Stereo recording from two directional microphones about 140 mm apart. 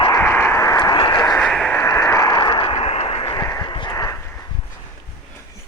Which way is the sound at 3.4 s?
25° left (ahead or behind).